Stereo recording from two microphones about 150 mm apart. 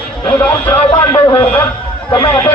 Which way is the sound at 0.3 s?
10° left (ahead or behind).